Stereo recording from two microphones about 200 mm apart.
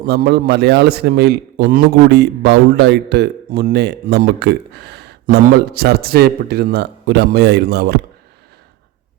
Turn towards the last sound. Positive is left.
turn(degrees=-55)  # may be behind; listen again after turning